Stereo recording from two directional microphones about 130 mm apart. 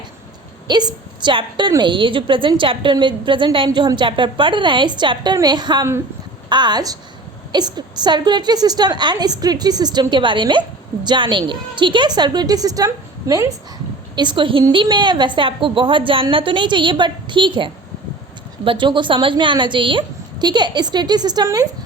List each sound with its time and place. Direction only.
0.7 s a woman's voice: 35° right (ahead or behind)